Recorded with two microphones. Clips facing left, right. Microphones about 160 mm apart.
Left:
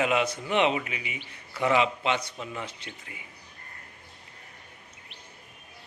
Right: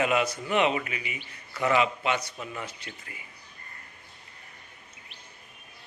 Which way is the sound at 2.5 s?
25° left (ahead or behind).